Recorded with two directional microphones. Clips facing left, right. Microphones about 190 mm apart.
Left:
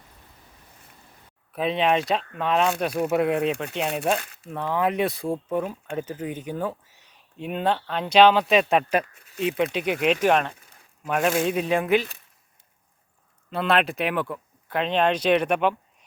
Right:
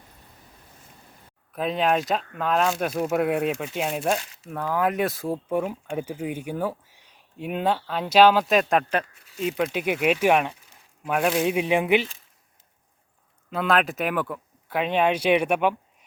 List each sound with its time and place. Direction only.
1.5 s speech: centre (ahead or behind)
4.2 s speech: 55° left (ahead or behind)
4.4 s speech: 5° right (ahead or behind)
5.5 s speech: 10° right (ahead or behind)
13.5 s speech: centre (ahead or behind)